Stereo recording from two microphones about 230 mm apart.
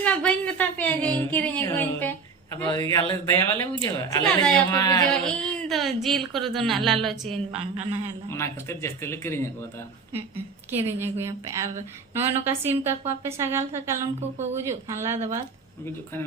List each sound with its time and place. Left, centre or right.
0.0 s a sound: centre
3.1 s speech: centre
5.1 s a woman's voice: centre
8.3 s speech: centre
10.7 s a woman's voice: centre
14.2 s a woman's voice: right
14.5 s a woman's voice: centre